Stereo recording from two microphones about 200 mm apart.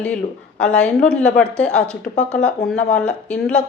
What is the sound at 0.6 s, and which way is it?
A woman's voice, 5° left (ahead or behind).